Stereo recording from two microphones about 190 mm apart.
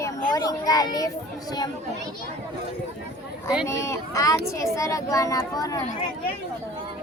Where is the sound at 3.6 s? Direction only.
15° left (ahead or behind).